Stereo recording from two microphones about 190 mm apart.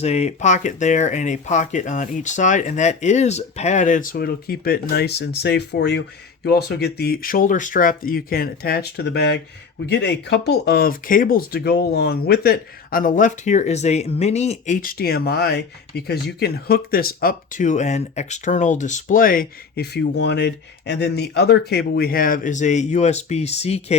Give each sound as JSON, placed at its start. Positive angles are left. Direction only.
{"t": 0.0, "sound": "speech", "side_deg": 35}
{"t": 14.8, "sound": "speech", "side_deg": 50}